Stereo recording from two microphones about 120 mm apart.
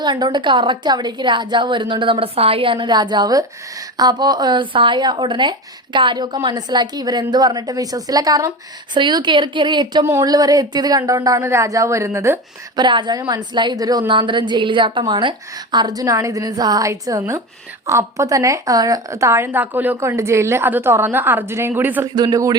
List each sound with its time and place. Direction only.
0.0 s speech: 40° right (ahead or behind)
9.0 s speech: 40° right (ahead or behind)
10.1 s a woman's voice: 30° right (ahead or behind)
12.7 s speech: 40° right (ahead or behind)
14.1 s a woman's voice: 40° right (ahead or behind); by 22.0 s 15° right (ahead or behind)
22.0 s speech: 35° right (ahead or behind)